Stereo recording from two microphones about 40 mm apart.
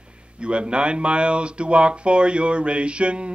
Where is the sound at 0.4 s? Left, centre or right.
Right.